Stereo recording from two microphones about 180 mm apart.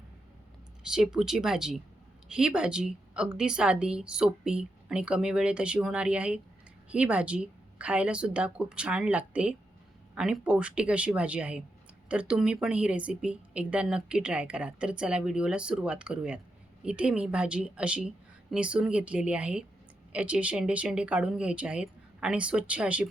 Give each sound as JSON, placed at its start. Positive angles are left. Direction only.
{"t": 0.9, "sound": "speech", "side_deg": -5}